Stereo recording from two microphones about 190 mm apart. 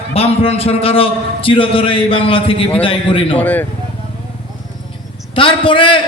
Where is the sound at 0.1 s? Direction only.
30° left (ahead or behind).